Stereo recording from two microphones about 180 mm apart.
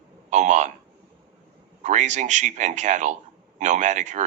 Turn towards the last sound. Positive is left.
turn(degrees=-40)  # may be behind; listen again after turning